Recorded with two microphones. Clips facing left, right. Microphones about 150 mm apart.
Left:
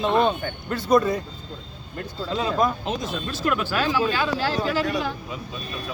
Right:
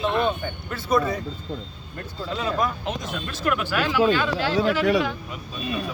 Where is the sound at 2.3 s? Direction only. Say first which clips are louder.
Left 3 dB; 35° left (ahead or behind).